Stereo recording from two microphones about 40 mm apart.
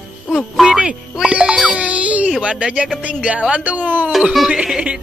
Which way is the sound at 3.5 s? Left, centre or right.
Right.